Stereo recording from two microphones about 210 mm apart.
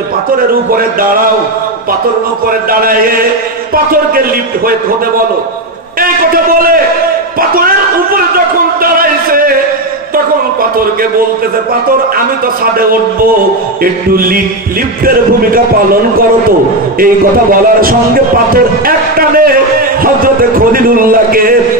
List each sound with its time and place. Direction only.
0.7 s a man's voice: 45° right (ahead or behind)
2.7 s a man's voice: 45° right (ahead or behind)
5.9 s a sound: 45° right (ahead or behind)
8.8 s music: 45° right (ahead or behind)
14.1 s a man's voice: 45° right (ahead or behind)